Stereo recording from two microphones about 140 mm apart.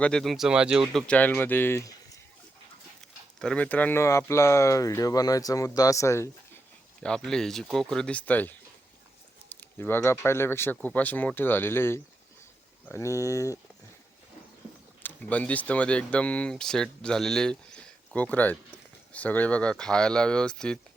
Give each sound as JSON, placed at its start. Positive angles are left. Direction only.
{"t": 0.0, "sound": "speech", "side_deg": 5}
{"t": 1.0, "sound": "speech", "side_deg": 10}
{"t": 3.3, "sound": "speech", "side_deg": 5}
{"t": 7.0, "sound": "speech", "side_deg": 5}
{"t": 9.6, "sound": "speech", "side_deg": 15}
{"t": 15.0, "sound": "speech", "side_deg": 10}